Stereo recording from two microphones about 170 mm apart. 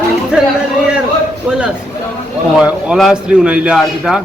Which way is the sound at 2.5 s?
5° right (ahead or behind).